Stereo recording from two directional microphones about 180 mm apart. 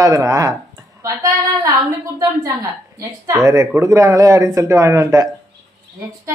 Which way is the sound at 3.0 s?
15° right (ahead or behind).